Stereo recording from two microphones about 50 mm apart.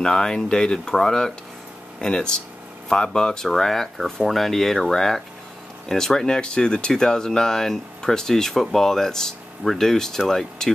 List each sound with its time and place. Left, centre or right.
0.0 s speech: centre